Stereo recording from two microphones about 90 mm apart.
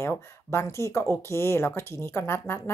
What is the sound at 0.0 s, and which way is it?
Speech, 30° left (ahead or behind).